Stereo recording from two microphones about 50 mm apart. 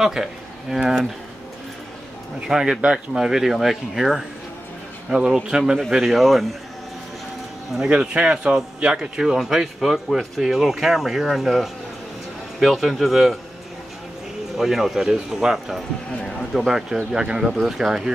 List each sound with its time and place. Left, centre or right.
0.0 s speech: centre
2.4 s speech: centre
5.9 s speech: centre
7.9 s speech: centre
14.6 s speech: centre
16.5 s speech: centre
17.5 s speech: centre